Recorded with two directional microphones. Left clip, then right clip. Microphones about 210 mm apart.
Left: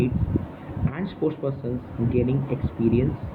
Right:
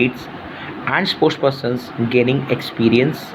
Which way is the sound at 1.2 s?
40° right (ahead or behind).